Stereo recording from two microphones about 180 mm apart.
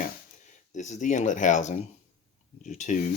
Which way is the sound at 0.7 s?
40° left (ahead or behind).